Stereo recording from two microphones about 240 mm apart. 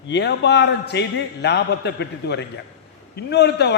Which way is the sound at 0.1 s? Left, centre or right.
Left.